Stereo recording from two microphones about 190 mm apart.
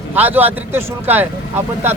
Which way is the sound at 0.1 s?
10° right (ahead or behind).